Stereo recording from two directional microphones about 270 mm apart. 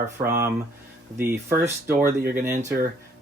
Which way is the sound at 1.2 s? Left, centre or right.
Centre.